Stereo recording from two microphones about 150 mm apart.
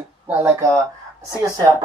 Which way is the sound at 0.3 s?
15° right (ahead or behind).